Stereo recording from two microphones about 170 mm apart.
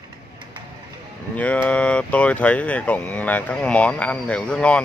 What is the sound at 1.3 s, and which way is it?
Speech, 10° left (ahead or behind).